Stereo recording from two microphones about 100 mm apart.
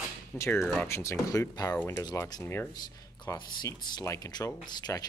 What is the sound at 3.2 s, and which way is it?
Speech, 40° left (ahead or behind).